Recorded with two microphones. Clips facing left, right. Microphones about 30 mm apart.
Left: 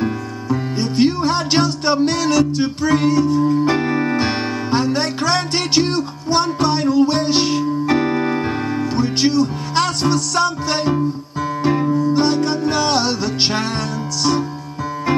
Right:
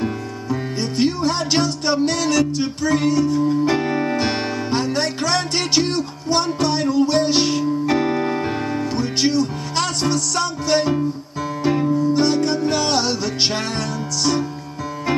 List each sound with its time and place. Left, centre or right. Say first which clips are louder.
0.7 s music: left 4 dB; centre